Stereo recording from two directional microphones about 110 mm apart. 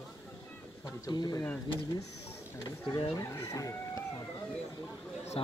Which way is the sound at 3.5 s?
30° left (ahead or behind).